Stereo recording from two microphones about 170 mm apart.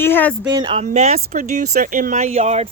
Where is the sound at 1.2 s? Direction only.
65° right (ahead or behind); by 2.7 s 40° right (ahead or behind).